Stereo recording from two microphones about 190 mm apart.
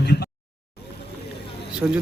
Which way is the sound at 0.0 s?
60° left (ahead or behind).